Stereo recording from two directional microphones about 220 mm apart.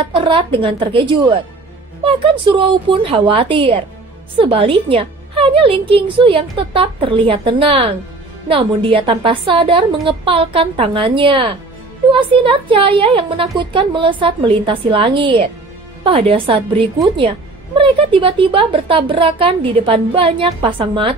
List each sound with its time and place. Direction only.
0.1 s a woman's voice: 25° right (ahead or behind)